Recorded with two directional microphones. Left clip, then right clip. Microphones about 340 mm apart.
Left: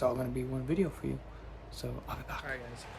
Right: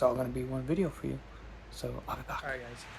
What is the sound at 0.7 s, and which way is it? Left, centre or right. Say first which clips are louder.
Speech: even; centre.